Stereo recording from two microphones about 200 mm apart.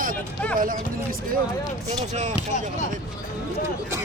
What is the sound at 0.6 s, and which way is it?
Speech, 45° right (ahead or behind).